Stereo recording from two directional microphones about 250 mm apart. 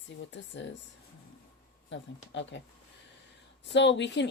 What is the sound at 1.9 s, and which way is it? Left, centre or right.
Speech, left.